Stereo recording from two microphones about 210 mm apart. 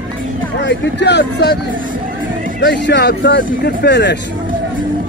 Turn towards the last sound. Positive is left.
turn(degrees=55)  # may be behind; listen again after turning